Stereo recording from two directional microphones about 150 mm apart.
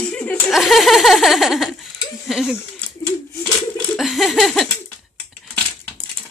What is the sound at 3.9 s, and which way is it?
Laughter, centre (ahead or behind).